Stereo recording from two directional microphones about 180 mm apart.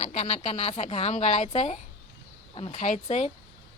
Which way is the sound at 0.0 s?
35° left (ahead or behind).